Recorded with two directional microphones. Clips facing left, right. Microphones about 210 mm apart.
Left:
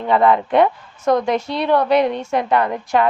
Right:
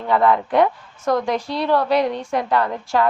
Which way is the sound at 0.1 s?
20° left (ahead or behind).